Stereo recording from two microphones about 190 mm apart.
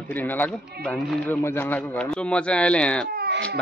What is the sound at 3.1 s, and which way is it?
Baby cry, 55° right (ahead or behind).